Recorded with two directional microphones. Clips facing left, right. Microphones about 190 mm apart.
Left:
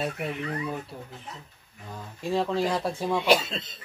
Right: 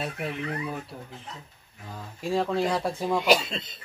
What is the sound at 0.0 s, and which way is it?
Speech, centre (ahead or behind).